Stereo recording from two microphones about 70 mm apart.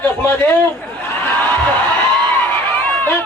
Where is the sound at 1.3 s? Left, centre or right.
Left.